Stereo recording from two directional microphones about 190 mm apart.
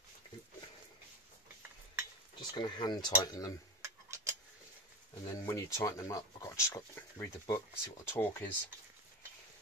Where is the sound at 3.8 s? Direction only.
15° right (ahead or behind).